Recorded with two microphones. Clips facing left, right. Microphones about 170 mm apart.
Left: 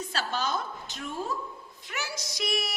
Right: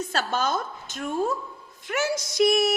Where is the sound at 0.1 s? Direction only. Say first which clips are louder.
Right 4 dB; 50° right (ahead or behind).